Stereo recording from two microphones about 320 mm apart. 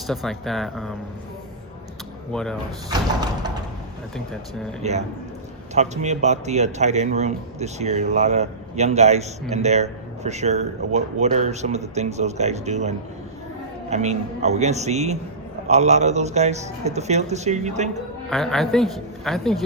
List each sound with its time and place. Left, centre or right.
0.1 s a man's voice: centre
2.3 s a man's voice: centre
2.9 s a sound: centre
4.8 s speech: right
13.9 s speech: right
18.3 s a man's voice: centre